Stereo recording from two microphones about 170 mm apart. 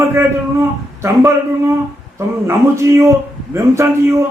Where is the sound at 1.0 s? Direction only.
15° right (ahead or behind).